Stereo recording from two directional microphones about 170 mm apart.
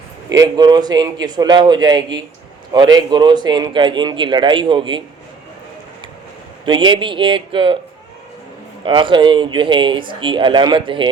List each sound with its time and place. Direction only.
0.3 s speech: 25° right (ahead or behind)
6.7 s speech: 25° right (ahead or behind)
8.8 s speech: 30° right (ahead or behind)